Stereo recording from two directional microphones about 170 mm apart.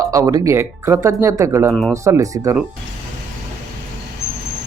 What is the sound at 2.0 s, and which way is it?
Speech, 20° right (ahead or behind).